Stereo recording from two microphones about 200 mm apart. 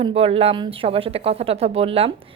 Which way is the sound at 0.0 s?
30° right (ahead or behind).